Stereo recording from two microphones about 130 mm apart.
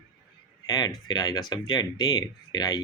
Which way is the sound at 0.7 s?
30° left (ahead or behind).